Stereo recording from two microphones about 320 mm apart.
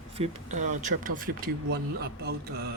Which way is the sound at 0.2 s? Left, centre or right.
Right.